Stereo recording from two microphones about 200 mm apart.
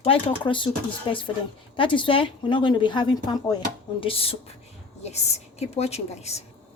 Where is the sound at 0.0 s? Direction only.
25° left (ahead or behind).